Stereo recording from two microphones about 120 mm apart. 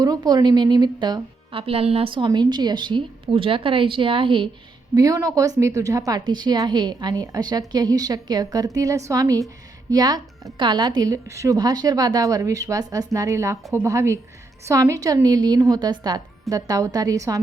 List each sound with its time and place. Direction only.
0.0 s a woman's voice: 35° right (ahead or behind)
1.6 s a woman's voice: 55° right (ahead or behind)
4.9 s a woman's voice: 30° right (ahead or behind)